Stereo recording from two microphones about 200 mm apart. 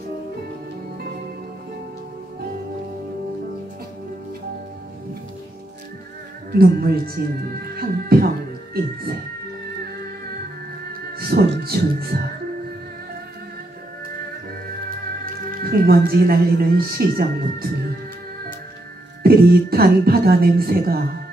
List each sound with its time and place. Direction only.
6.5 s speech: 50° right (ahead or behind)
10.9 s music: 50° right (ahead or behind)
14.9 s speech: 45° right (ahead or behind)
19.2 s speech: 50° right (ahead or behind)